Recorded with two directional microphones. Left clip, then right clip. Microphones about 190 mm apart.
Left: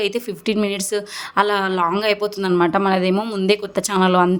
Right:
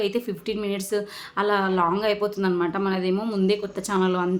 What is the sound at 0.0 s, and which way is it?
A woman's voice, 45° left (ahead or behind).